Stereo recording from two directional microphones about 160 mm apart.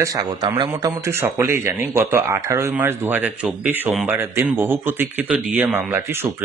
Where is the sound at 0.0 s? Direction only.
20° right (ahead or behind).